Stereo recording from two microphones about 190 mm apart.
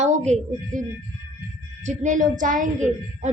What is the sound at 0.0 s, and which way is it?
A woman's voice, 35° right (ahead or behind).